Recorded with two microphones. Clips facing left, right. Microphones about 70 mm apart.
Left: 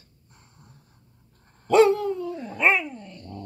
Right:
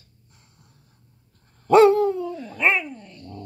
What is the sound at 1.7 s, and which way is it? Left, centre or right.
Dog, right.